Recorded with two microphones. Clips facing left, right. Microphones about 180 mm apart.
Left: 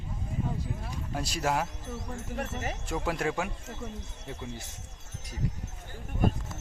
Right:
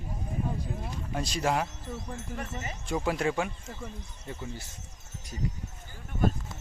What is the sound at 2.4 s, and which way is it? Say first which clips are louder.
Speech: left 7 dB; 70° left (ahead or behind).